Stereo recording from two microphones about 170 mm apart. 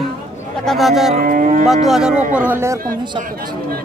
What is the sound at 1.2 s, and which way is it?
Moo, 50° right (ahead or behind).